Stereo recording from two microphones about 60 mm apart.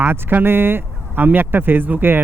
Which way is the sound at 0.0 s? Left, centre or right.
Right.